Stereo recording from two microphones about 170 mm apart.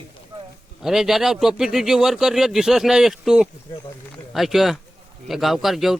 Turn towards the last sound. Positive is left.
turn(degrees=0)  # may be behind; listen again after turning